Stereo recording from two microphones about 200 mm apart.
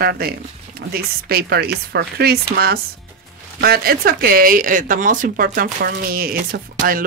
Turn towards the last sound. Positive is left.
turn(degrees=-45)  # may be behind; listen again after turning